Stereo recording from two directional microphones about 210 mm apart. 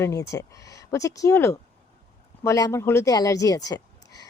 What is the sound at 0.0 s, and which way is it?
Speech, 15° left (ahead or behind).